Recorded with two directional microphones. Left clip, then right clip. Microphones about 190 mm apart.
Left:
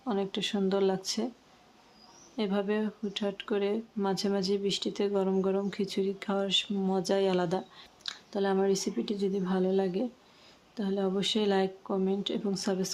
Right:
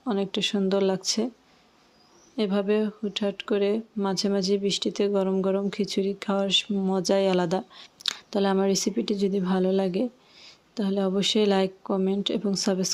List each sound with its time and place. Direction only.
0.0 s speech: 25° right (ahead or behind)
2.3 s speech: 25° right (ahead or behind)